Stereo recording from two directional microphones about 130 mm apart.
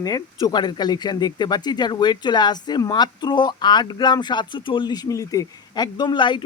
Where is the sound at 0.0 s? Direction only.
30° left (ahead or behind).